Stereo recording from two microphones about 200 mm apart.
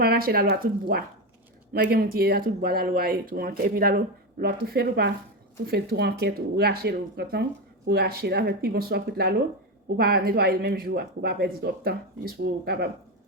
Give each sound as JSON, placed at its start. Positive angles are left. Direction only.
{"t": 0.0, "sound": "speech", "side_deg": -50}